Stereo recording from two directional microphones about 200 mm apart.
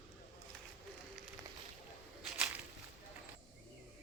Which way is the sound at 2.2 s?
5° right (ahead or behind).